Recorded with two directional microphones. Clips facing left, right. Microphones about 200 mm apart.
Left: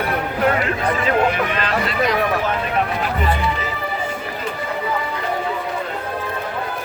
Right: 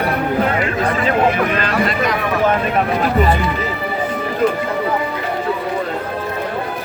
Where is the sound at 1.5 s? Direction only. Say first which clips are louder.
Right 3 dB; 45° right (ahead or behind).